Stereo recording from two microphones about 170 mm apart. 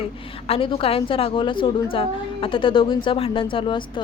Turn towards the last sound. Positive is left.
turn(degrees=30)  # may be behind; listen again after turning